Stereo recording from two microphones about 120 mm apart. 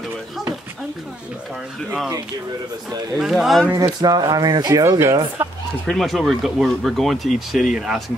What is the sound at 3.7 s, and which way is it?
Speech, 30° right (ahead or behind).